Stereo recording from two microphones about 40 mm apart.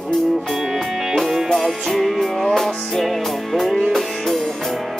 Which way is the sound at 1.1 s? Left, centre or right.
Centre.